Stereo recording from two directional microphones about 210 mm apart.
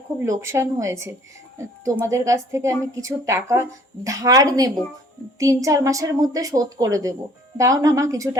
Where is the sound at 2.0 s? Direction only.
15° right (ahead or behind).